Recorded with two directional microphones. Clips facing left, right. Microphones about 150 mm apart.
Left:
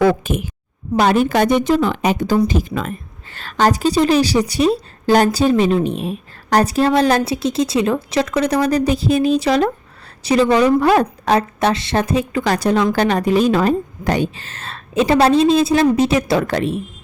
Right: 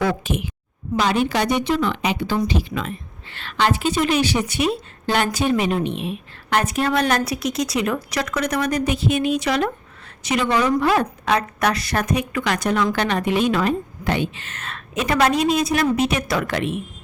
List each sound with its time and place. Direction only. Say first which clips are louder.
0.0 s a woman's voice: left 7 dB; 50° left (ahead or behind)